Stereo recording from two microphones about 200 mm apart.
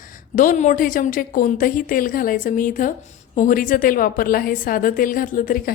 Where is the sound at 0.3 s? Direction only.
40° left (ahead or behind).